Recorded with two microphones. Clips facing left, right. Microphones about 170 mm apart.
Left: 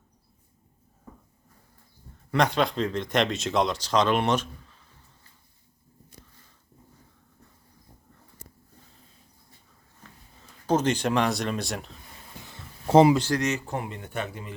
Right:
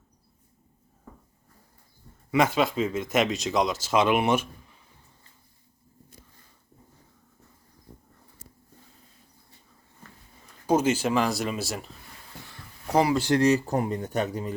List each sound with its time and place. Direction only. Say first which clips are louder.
2.3 s speech: right 1 dB; 5° right (ahead or behind)
10.7 s speech: right 1 dB; 5° right (ahead or behind)
12.5 s a sound: left 6 dB; 25° left (ahead or behind)
13.3 s speech: right 6 dB; 35° right (ahead or behind)